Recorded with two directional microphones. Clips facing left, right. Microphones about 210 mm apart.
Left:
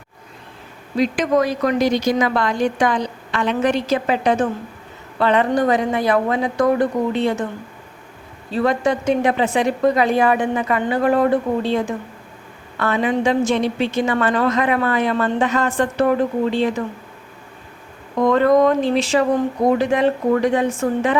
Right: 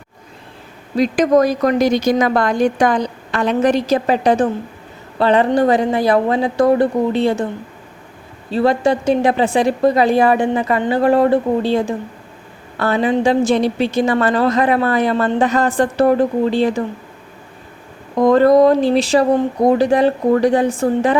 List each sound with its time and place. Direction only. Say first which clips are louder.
0.9 s a woman's voice: right 4 dB; 40° right (ahead or behind)
8.5 s a woman's voice: right 3 dB; 30° right (ahead or behind)
18.2 s a woman's voice: right 4 dB; 35° right (ahead or behind)